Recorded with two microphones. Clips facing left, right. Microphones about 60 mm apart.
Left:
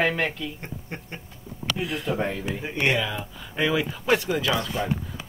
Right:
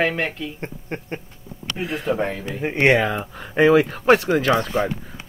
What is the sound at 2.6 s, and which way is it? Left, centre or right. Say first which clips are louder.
Speech: right 8 dB; right.